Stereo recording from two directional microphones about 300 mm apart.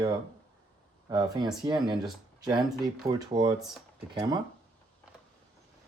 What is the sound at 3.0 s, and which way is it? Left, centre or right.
Speech, centre.